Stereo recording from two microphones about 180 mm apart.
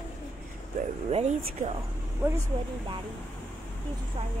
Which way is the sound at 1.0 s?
35° right (ahead or behind).